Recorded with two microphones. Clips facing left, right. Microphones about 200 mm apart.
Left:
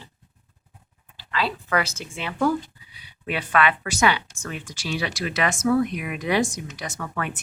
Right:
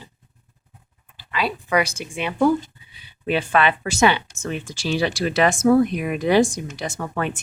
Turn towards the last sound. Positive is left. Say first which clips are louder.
# right 4 dB
turn(degrees=-25)  # may be behind; listen again after turning